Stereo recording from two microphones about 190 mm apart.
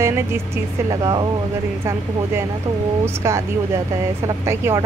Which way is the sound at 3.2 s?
15° right (ahead or behind).